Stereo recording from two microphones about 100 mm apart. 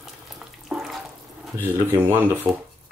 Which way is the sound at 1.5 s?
20° right (ahead or behind).